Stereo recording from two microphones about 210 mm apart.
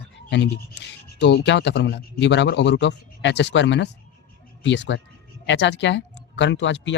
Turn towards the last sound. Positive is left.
turn(degrees=60)  # may be behind; listen again after turning